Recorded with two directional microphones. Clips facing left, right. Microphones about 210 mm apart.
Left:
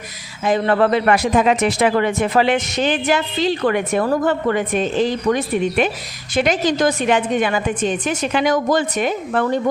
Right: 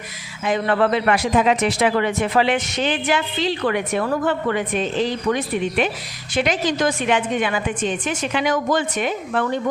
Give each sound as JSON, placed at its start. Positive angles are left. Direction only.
{"t": 0.4, "sound": "a man's voice", "side_deg": 40}